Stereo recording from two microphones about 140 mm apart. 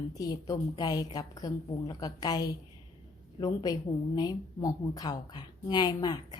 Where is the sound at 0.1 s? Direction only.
25° left (ahead or behind).